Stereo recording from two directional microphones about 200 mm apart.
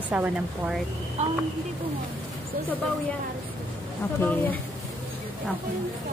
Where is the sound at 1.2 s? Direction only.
35° right (ahead or behind).